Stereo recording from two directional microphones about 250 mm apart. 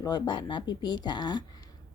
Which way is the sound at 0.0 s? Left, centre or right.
Centre.